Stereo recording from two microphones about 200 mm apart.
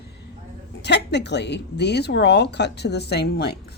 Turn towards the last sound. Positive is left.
turn(degrees=55)  # may be behind; listen again after turning